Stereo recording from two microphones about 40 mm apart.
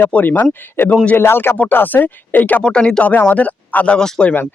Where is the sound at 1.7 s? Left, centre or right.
Left.